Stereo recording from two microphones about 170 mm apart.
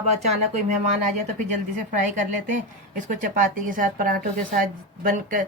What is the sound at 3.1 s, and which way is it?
A woman's voice, 50° right (ahead or behind).